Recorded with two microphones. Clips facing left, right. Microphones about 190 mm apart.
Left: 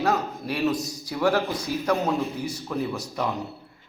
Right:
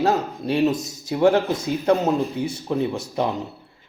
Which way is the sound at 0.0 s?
20° right (ahead or behind).